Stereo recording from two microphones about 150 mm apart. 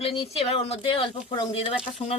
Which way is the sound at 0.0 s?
40° left (ahead or behind).